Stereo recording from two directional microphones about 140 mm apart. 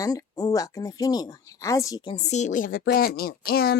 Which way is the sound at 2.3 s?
60° left (ahead or behind).